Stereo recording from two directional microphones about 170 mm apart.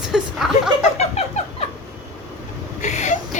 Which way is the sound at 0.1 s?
Centre (ahead or behind).